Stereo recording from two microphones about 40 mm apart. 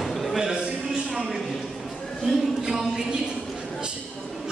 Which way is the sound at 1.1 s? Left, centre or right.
Centre.